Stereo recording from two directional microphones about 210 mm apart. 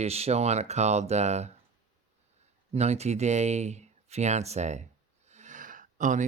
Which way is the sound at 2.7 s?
30° right (ahead or behind).